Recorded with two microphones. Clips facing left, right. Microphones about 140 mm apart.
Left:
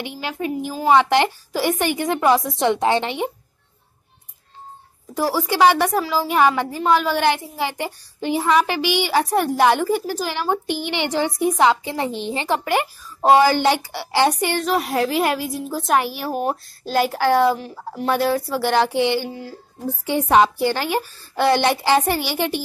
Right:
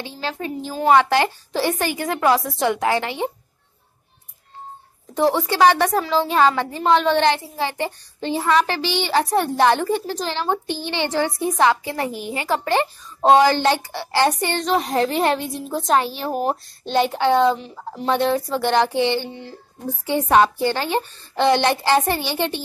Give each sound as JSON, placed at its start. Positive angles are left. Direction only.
{"t": 0.0, "sound": "a woman's voice", "side_deg": 15}
{"t": 5.5, "sound": "a woman's voice", "side_deg": 10}